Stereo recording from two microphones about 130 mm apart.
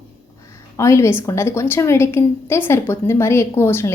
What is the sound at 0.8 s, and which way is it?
A woman's voice, 20° left (ahead or behind).